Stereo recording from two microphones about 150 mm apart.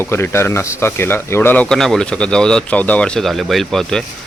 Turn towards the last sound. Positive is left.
turn(degrees=0)  # may be behind; listen again after turning